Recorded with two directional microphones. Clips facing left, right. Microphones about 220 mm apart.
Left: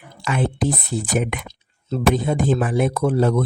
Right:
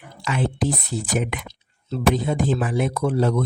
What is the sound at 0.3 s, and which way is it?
Speech, 55° left (ahead or behind).